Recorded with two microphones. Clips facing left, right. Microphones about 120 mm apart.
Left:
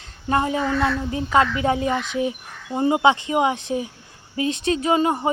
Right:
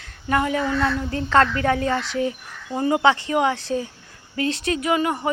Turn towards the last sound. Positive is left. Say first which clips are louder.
# left 2 dB
turn(degrees=25)  # may be behind; listen again after turning